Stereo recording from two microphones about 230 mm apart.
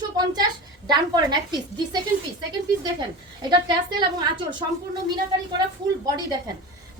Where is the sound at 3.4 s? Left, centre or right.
Centre.